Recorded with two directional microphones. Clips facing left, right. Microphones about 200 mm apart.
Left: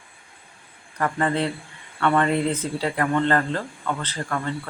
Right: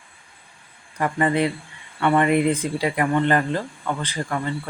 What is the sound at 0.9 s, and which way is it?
Speech, 10° right (ahead or behind).